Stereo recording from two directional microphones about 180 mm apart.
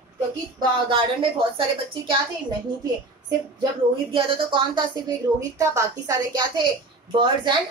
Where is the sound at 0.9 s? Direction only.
30° right (ahead or behind).